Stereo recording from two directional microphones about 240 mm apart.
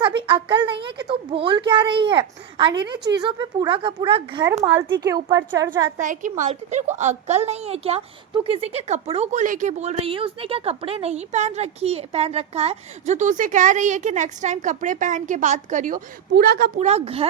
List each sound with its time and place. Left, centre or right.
0.2 s speech: right
6.0 s speech: right